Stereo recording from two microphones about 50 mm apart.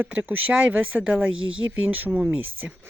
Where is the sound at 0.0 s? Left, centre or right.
Right.